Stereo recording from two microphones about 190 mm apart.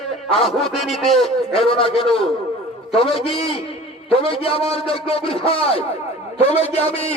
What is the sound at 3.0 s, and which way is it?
A man's voice, 30° left (ahead or behind).